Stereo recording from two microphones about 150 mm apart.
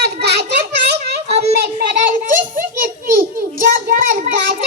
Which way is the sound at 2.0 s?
60° right (ahead or behind).